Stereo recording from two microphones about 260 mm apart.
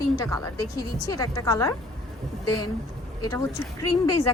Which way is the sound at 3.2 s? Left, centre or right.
Centre.